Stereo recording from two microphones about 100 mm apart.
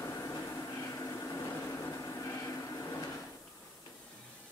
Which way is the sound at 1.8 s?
30° left (ahead or behind).